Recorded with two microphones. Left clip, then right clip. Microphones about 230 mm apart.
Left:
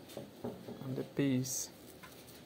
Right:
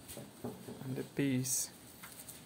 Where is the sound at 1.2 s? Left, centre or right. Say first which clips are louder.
Even; centre.